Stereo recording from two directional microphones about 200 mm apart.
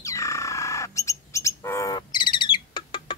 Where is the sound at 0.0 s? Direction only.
15° left (ahead or behind).